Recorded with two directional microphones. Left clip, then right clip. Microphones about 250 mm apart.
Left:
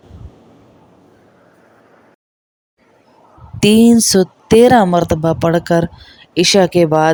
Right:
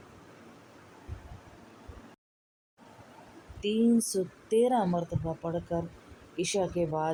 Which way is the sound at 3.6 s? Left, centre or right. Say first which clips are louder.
Left 17 dB; left.